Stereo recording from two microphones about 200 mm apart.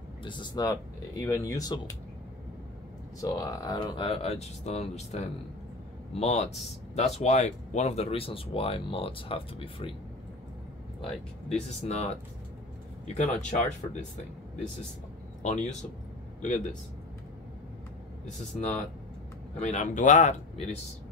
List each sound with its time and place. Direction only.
0.2 s speech: 25° left (ahead or behind)
3.2 s speech: 20° left (ahead or behind)
11.5 s speech: 35° left (ahead or behind)
15.4 s speech: 35° left (ahead or behind)
18.2 s speech: 35° left (ahead or behind)